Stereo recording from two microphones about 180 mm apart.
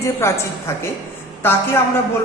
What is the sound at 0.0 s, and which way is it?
A man's voice, 15° left (ahead or behind).